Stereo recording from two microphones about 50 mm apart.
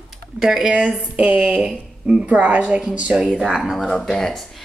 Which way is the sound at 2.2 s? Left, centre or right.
Right.